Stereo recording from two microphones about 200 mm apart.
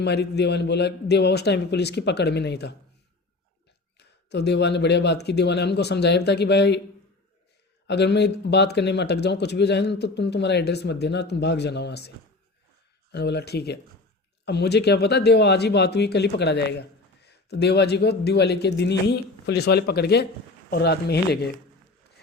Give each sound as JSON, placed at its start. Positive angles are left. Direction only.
{"t": 0.0, "sound": "speech", "side_deg": 55}
{"t": 3.9, "sound": "speech", "side_deg": 55}
{"t": 7.9, "sound": "speech", "side_deg": 55}